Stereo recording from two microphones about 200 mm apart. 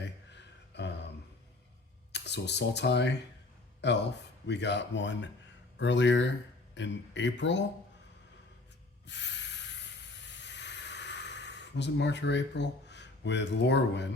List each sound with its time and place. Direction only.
0.0 s a sound: 60° left (ahead or behind)
2.1 s speech: 60° left (ahead or behind)
9.0 s hiss: 60° left (ahead or behind)